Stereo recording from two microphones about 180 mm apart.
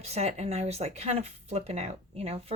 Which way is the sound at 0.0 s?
35° right (ahead or behind).